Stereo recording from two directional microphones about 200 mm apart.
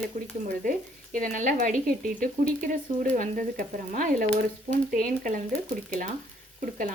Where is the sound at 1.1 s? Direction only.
40° right (ahead or behind).